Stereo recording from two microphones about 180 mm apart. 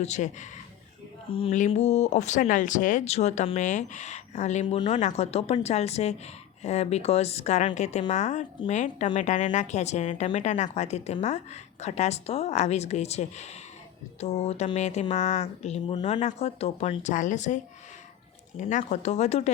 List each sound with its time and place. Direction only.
0.0 s a woman's voice: 40° left (ahead or behind)
18.6 s a woman's voice: 45° left (ahead or behind)